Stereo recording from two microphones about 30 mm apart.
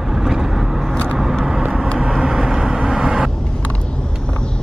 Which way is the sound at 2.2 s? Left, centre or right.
Right.